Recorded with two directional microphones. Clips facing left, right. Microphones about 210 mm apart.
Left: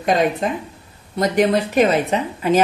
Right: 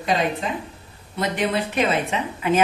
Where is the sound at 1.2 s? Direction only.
45° left (ahead or behind).